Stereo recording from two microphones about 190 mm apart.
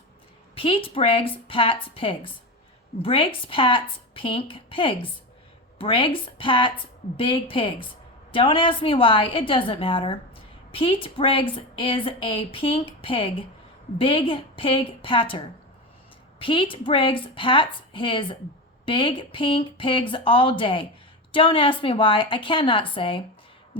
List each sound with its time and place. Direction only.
0.5 s a woman's voice: 30° left (ahead or behind)